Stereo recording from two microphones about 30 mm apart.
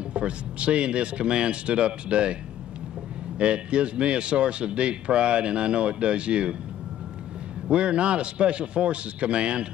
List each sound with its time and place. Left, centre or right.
0.1 s speech: right
3.3 s speech: right
7.7 s speech: right